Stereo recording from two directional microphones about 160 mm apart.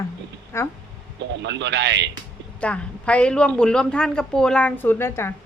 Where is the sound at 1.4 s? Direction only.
90° right.